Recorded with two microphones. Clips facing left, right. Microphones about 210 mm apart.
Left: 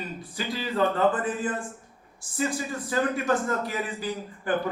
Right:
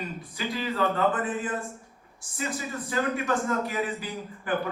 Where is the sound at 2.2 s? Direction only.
30° left (ahead or behind).